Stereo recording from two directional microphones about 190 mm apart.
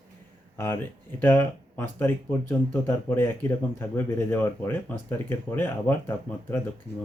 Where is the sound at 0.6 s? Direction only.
10° left (ahead or behind).